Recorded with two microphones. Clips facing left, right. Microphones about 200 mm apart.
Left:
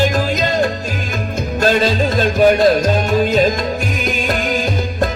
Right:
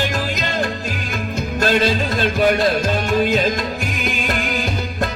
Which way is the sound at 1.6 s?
40° left (ahead or behind).